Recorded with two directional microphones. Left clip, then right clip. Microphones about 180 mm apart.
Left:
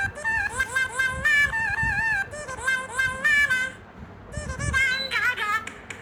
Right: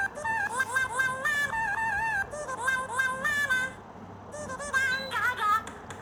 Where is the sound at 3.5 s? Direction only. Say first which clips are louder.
Left 3 dB; 55° left (ahead or behind).